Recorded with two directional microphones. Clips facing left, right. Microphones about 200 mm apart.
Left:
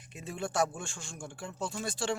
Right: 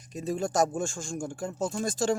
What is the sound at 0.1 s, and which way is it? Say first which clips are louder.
Speech: right 7 dB; 40° right (ahead or behind).